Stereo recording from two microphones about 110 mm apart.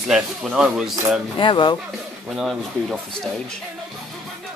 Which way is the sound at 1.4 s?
45° left (ahead or behind).